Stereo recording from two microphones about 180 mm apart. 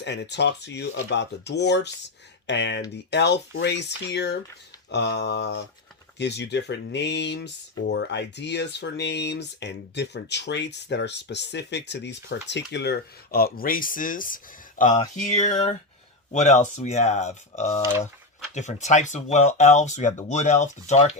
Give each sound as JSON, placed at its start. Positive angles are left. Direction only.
{"t": 0.0, "sound": "speech", "side_deg": 70}